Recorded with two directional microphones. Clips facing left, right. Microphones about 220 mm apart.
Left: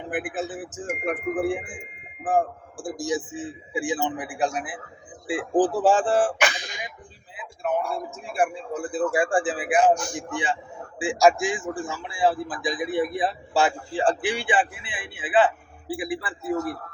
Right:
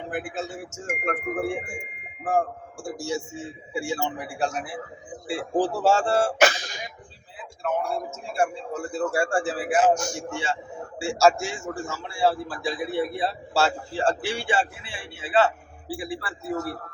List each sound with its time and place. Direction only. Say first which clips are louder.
0.1 s a man's voice: left 3 dB; 15° left (ahead or behind)
6.4 s cough: right 5 dB; 40° right (ahead or behind)
8.9 s a man's voice: left 2 dB; 15° left (ahead or behind)